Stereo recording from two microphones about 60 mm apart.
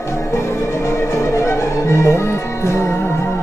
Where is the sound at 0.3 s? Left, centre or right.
Left.